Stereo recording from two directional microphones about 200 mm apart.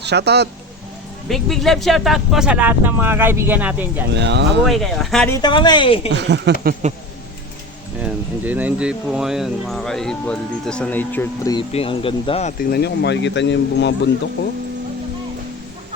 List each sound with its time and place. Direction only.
0.0 s speech: 55° right (ahead or behind)
1.3 s speech: centre (ahead or behind)
4.1 s speech: 60° right (ahead or behind)
4.6 s speech: centre (ahead or behind)
5.3 s speech: 20° left (ahead or behind)
6.1 s speech: 60° right (ahead or behind)
8.0 s speech: 5° right (ahead or behind); by 11.5 s 10° left (ahead or behind)
11.5 s speech: 25° left (ahead or behind)
12.7 s speech: 55° left (ahead or behind)